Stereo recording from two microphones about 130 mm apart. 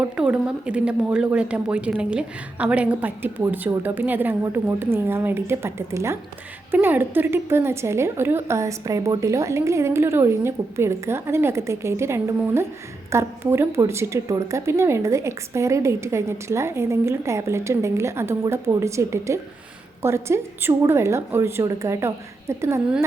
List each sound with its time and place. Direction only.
0.0 s a woman's voice: 10° right (ahead or behind)